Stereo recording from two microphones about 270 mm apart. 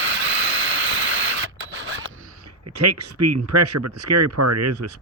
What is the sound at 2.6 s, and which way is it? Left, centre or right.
Speech, right.